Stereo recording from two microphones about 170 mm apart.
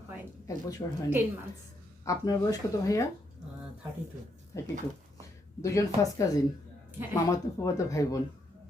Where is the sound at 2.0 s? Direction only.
20° left (ahead or behind).